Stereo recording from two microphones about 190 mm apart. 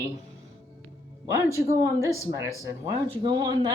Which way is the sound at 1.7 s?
15° right (ahead or behind).